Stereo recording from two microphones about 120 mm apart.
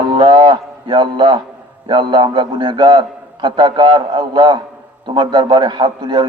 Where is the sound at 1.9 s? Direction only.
40° right (ahead or behind).